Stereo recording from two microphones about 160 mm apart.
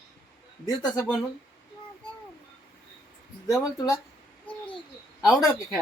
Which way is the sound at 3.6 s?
20° left (ahead or behind).